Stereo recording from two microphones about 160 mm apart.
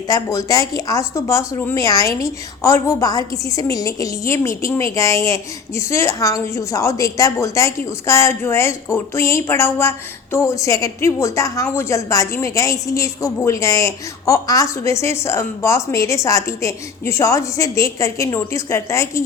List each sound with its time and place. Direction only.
0.1 s speech: 20° left (ahead or behind)